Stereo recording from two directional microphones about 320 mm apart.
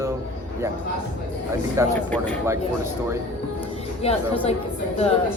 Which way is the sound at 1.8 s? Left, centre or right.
Centre.